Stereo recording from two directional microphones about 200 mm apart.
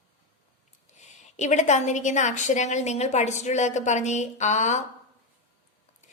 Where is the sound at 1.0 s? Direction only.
35° left (ahead or behind).